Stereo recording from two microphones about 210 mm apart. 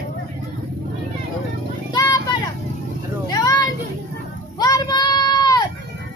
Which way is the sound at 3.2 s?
20° left (ahead or behind).